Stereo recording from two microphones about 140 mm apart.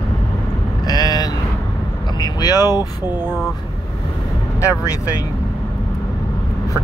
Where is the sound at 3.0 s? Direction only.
10° right (ahead or behind).